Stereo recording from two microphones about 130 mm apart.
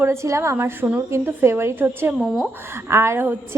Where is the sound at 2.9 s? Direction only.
20° right (ahead or behind).